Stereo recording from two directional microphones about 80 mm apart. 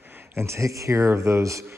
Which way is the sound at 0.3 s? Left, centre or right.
Right.